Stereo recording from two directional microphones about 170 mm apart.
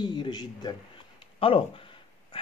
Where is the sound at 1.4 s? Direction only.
35° left (ahead or behind).